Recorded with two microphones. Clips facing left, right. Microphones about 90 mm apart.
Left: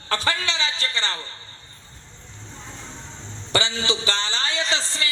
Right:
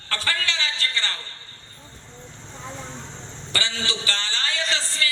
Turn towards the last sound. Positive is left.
turn(degrees=20)  # may be behind; listen again after turning